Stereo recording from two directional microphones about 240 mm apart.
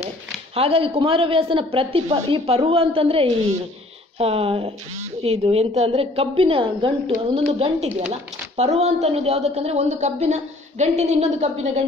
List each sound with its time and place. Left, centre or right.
0.6 s a woman's voice: right